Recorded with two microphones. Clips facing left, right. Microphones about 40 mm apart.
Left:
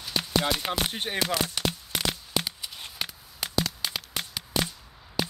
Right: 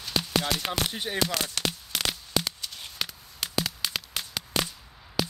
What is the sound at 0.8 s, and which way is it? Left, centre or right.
Speech, left.